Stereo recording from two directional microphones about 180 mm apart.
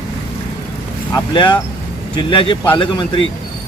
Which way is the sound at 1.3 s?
25° left (ahead or behind).